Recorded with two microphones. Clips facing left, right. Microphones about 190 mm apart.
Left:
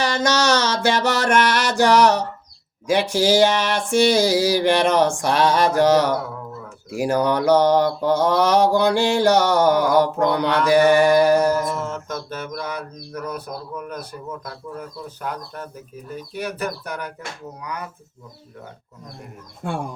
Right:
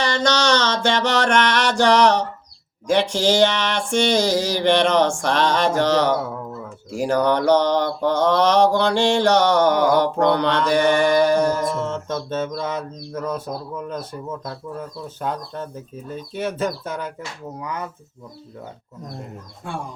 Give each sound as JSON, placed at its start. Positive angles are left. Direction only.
{"t": 0.0, "sound": "mantra", "side_deg": 5}
{"t": 11.6, "sound": "mantra", "side_deg": -25}